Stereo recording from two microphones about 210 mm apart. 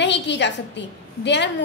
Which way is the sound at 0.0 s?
55° left (ahead or behind).